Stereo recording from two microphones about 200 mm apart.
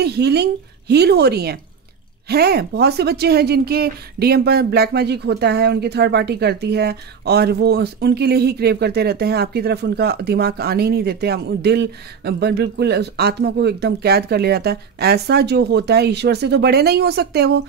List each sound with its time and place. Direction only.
0.0 s a woman's voice: 55° right (ahead or behind)